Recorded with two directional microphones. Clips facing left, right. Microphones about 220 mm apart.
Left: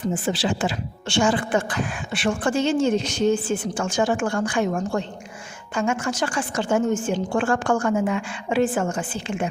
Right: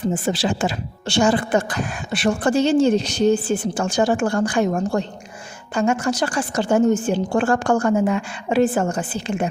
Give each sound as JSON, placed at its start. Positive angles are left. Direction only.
{"t": 0.1, "sound": "speech", "side_deg": -40}